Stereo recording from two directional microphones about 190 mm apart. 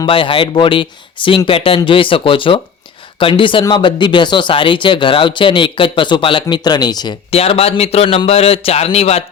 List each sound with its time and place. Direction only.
0.0 s speech: 25° left (ahead or behind)